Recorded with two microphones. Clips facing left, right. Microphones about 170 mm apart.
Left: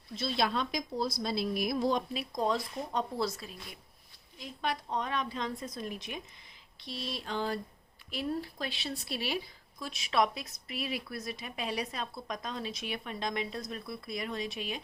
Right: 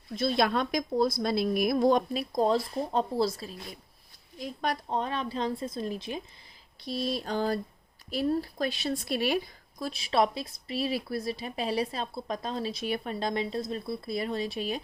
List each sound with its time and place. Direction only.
0.1 s speech: 55° right (ahead or behind)
2.3 s speech: 30° right (ahead or behind); by 9.4 s 50° right (ahead or behind)
9.7 s speech: 35° right (ahead or behind)